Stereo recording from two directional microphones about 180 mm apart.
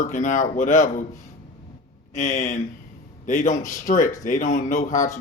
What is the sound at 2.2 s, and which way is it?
Speech, 45° left (ahead or behind).